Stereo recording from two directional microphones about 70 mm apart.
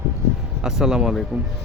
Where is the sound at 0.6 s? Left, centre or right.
Centre.